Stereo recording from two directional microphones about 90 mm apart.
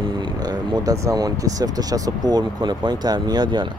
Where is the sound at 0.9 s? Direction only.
45° right (ahead or behind).